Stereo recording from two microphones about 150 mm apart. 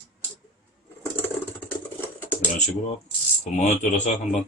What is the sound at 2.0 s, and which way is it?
Patter, 10° left (ahead or behind).